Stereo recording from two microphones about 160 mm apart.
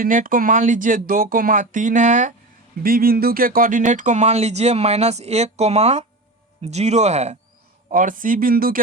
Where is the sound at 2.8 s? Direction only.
65° right (ahead or behind); by 7.4 s 45° right (ahead or behind).